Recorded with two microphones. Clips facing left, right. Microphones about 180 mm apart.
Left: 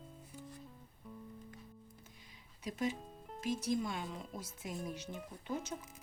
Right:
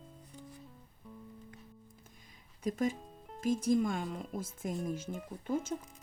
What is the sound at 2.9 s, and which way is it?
Music, centre (ahead or behind).